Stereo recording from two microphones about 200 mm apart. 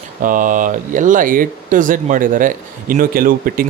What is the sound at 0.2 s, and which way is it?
Speech, 40° right (ahead or behind).